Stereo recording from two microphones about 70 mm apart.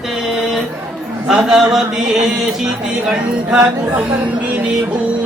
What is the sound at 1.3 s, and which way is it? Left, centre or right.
Speech, centre.